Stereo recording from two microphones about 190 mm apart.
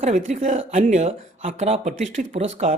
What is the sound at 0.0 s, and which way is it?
Speech, 40° right (ahead or behind).